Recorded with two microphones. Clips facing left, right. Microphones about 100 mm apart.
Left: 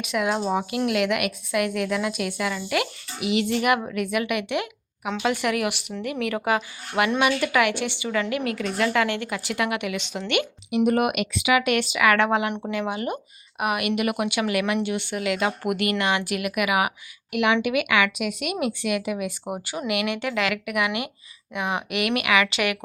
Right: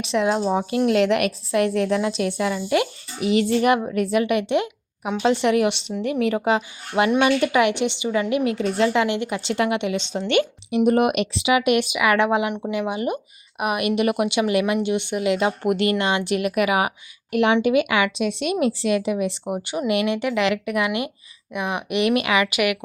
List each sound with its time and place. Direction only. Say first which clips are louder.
0.0 s a woman's voice: right 4 dB; 30° right (ahead or behind)
19.5 s speech: right 4 dB; 20° left (ahead or behind)
19.9 s a woman's voice: right 4 dB; 25° right (ahead or behind)
21.6 s speech: right 1 dB; 25° left (ahead or behind)
21.8 s a woman's voice: right 6 dB; 25° right (ahead or behind)